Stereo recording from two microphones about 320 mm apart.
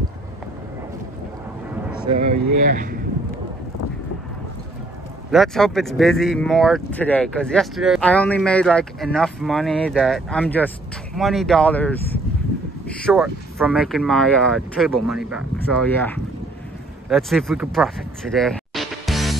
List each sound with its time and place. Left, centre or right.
2.0 s a sound: centre
2.6 s speech: right
5.3 s speech: centre